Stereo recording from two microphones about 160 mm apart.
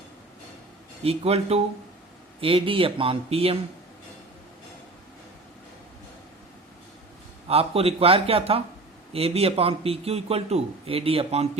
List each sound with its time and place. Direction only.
1.0 s a man's voice: 40° right (ahead or behind)
7.4 s a man's voice: 35° right (ahead or behind)